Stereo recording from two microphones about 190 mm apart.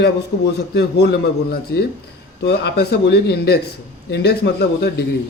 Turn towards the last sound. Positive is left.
turn(degrees=55)  # may be behind; listen again after turning